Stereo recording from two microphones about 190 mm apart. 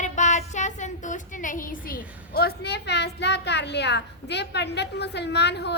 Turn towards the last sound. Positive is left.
turn(degrees=60)  # may be behind; listen again after turning